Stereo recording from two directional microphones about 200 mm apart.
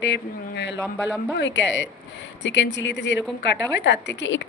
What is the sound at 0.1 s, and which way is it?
A woman's voice, 60° left (ahead or behind).